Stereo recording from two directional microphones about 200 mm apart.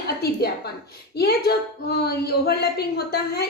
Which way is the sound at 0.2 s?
50° left (ahead or behind).